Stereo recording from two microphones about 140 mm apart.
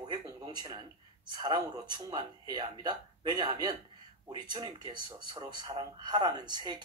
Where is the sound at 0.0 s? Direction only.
30° right (ahead or behind).